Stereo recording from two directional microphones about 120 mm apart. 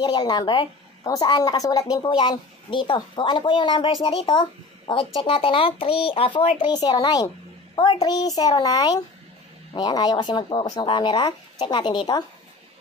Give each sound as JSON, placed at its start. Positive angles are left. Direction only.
{"t": 0.0, "sound": "a woman's voice", "side_deg": 35}
{"t": 2.1, "sound": "a woman's voice", "side_deg": 40}